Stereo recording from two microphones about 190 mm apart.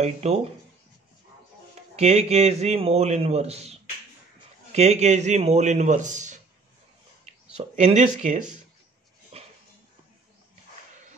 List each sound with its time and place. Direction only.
0.0 s a man's voice: 35° right (ahead or behind)
2.0 s a man's voice: 35° right (ahead or behind)
4.7 s a man's voice: 35° right (ahead or behind)
7.5 s a man's voice: 35° right (ahead or behind)
9.3 s a sound: 30° right (ahead or behind)